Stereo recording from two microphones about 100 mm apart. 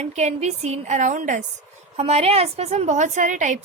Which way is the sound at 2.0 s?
85° right.